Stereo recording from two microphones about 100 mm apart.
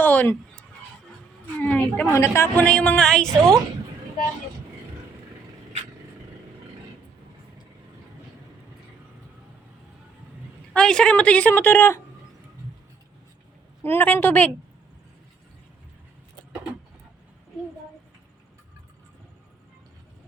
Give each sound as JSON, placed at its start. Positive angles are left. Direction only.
{"t": 0.0, "sound": "a sound", "side_deg": 20}
{"t": 1.5, "sound": "a sound", "side_deg": 15}
{"t": 2.0, "sound": "a woman's voice", "side_deg": 25}
{"t": 2.6, "sound": "a woman's voice", "side_deg": 10}
{"t": 10.8, "sound": "a woman's voice", "side_deg": 10}
{"t": 13.8, "sound": "a woman's voice", "side_deg": 20}